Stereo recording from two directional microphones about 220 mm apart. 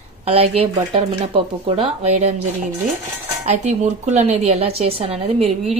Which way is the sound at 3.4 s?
30° right (ahead or behind).